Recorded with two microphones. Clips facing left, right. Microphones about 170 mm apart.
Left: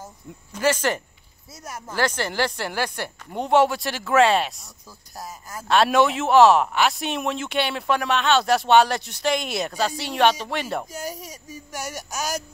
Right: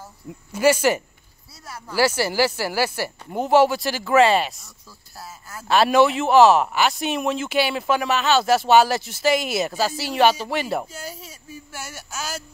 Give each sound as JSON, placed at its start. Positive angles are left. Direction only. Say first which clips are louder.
{"t": 0.5, "sound": "speech", "louder": "right 4 dB", "side_deg": -10}
{"t": 1.6, "sound": "speech", "louder": "left 1 dB", "side_deg": 20}
{"t": 2.0, "sound": "speech", "louder": "right 4 dB", "side_deg": -10}
{"t": 5.7, "sound": "speech", "louder": "right 2 dB", "side_deg": 0}
{"t": 10.9, "sound": "child singing", "louder": "left 3 dB", "side_deg": 15}